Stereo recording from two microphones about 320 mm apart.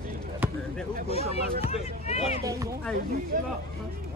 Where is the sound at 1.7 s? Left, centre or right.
Centre.